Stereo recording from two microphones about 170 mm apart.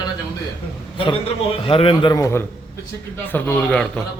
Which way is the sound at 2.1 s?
20° left (ahead or behind).